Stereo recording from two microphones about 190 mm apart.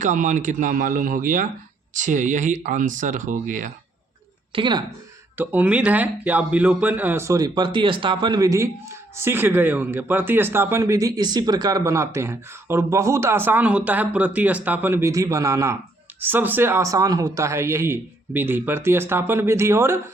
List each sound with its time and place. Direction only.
0.0 s speech: 40° right (ahead or behind)
4.5 s speech: 25° right (ahead or behind)
5.4 s speech: 10° right (ahead or behind)